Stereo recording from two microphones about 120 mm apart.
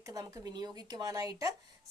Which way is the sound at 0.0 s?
30° right (ahead or behind).